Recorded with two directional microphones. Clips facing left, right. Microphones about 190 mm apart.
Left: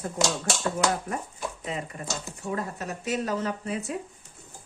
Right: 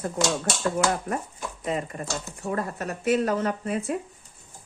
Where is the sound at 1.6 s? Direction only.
50° right (ahead or behind).